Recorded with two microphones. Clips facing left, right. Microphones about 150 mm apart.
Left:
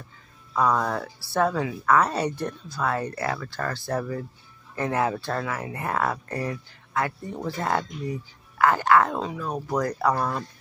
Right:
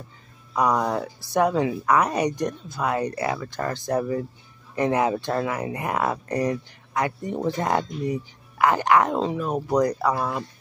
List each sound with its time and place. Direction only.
0.5 s a woman's voice: 15° right (ahead or behind)
10.0 s speech: 5° right (ahead or behind)